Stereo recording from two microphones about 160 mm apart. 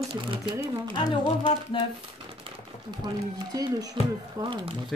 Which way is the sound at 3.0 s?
25° right (ahead or behind).